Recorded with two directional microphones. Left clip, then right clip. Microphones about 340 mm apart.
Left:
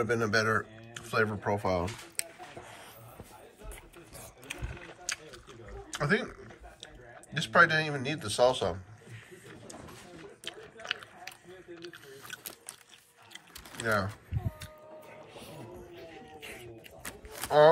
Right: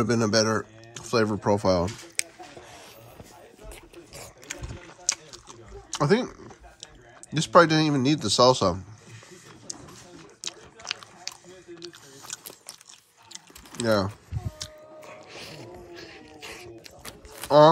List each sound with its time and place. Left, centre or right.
0.0 s speech: centre
5.0 s a sound: centre
7.3 s speech: centre
10.4 s biting: centre
12.3 s a sound: centre
15.9 s music: centre